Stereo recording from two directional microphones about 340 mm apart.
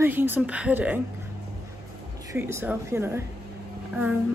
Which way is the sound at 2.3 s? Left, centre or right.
Centre.